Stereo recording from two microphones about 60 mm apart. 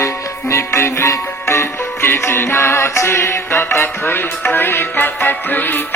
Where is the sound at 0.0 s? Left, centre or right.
Left.